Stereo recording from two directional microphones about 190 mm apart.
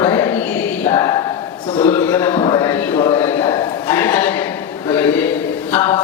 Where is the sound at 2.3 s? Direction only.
25° left (ahead or behind).